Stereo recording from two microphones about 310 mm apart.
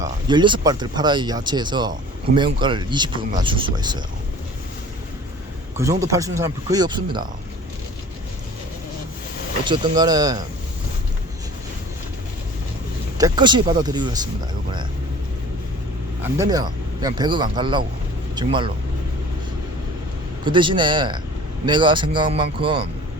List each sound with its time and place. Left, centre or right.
0.0 s speech: centre
5.7 s speech: centre
9.6 s speech: centre
13.1 s speech: centre
16.2 s speech: centre
20.4 s speech: centre